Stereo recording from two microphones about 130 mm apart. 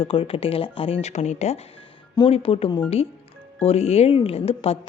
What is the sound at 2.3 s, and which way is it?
A woman's voice, 50° left (ahead or behind).